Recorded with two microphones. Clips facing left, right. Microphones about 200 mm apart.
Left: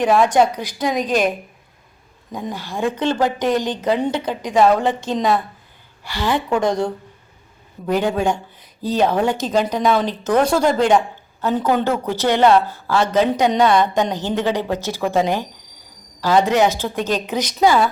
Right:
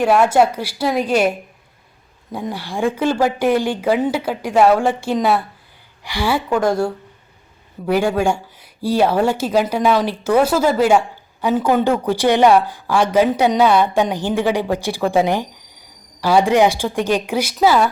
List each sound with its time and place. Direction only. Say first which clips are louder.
0.0 s a woman's voice: right 1 dB; 5° right (ahead or behind)